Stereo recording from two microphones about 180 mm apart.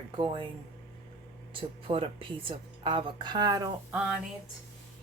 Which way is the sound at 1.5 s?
30° right (ahead or behind).